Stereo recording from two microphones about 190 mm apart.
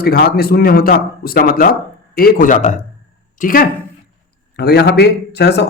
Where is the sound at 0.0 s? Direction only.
55° left (ahead or behind).